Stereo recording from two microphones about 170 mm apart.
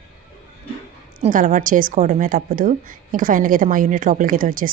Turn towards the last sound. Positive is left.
turn(degrees=-55)  # may be behind; listen again after turning